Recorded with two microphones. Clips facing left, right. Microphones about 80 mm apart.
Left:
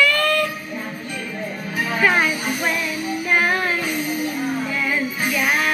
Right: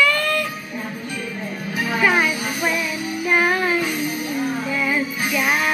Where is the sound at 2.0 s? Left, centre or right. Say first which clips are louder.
Even; centre.